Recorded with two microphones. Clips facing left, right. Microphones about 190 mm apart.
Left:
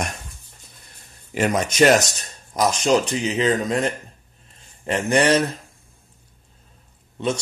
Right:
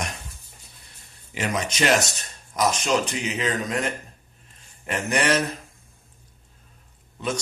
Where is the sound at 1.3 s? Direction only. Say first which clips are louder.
Left 6 dB; 45° left (ahead or behind).